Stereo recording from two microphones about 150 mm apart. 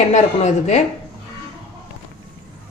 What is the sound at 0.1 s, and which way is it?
Speech, 50° left (ahead or behind).